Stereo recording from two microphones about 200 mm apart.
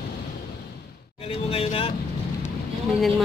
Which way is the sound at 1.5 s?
30° left (ahead or behind).